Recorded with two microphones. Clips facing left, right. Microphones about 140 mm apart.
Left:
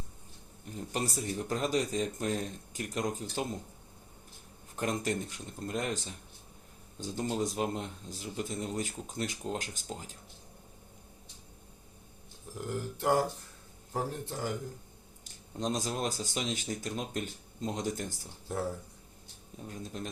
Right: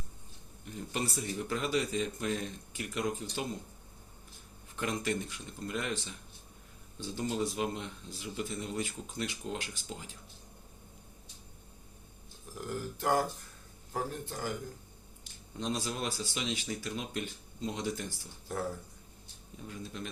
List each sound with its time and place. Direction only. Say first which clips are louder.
0.7 s a man's voice: left 1 dB; 40° left (ahead or behind)
4.8 s a man's voice: left 1 dB; 40° left (ahead or behind)
12.5 s speech: left 1 dB; 25° left (ahead or behind)
15.2 s a man's voice: left 3 dB; 40° left (ahead or behind)
18.4 s speech: left 2 dB; 25° left (ahead or behind)
19.6 s a man's voice: left 1 dB; 40° left (ahead or behind)